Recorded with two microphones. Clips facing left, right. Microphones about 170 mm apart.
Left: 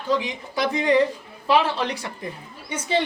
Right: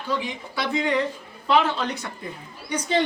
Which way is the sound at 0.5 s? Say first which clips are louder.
Left 4 dB; 40° left (ahead or behind).